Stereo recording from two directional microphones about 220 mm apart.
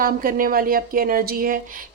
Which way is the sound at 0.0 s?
40° right (ahead or behind).